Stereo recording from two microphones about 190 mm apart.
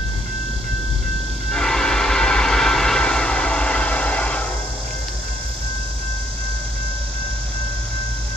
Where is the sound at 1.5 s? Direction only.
5° left (ahead or behind).